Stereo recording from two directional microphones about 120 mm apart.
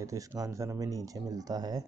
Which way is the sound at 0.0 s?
25° right (ahead or behind).